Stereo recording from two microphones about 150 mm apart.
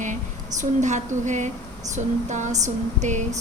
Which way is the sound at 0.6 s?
55° right (ahead or behind).